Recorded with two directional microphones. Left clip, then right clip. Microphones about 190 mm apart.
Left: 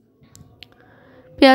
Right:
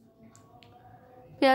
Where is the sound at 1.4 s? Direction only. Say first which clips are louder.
Left 10 dB; 40° left (ahead or behind).